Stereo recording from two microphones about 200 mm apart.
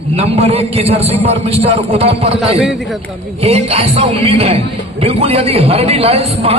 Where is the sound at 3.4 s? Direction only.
30° right (ahead or behind).